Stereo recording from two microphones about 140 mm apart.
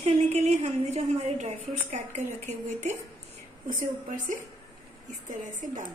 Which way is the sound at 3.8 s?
70° right (ahead or behind).